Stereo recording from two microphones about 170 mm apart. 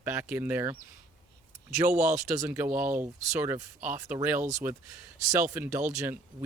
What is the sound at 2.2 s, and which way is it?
Speech, 15° right (ahead or behind).